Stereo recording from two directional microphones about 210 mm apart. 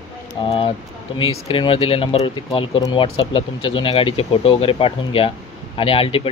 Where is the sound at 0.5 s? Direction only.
25° left (ahead or behind).